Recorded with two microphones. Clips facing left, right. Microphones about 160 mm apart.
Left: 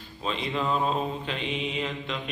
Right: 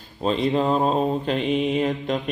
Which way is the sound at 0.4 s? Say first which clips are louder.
Right 6 dB; 40° right (ahead or behind).